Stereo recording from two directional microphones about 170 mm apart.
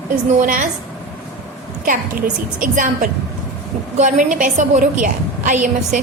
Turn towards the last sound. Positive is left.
turn(degrees=-45)  # may be behind; listen again after turning